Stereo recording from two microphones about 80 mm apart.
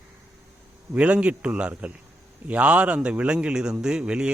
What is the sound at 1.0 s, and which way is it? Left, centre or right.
A man's voice, centre.